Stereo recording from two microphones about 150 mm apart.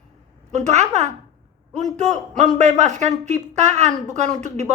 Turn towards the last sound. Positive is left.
turn(degrees=-50)  # may be behind; listen again after turning